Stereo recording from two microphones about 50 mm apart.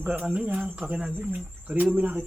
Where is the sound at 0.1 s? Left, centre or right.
Right.